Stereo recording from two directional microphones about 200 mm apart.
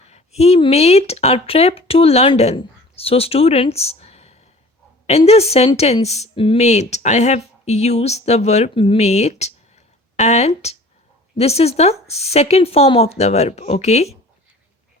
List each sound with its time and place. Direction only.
0.0 s speech: 30° left (ahead or behind)